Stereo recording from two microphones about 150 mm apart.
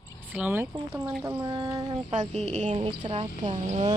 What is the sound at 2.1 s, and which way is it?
Speech, 50° right (ahead or behind).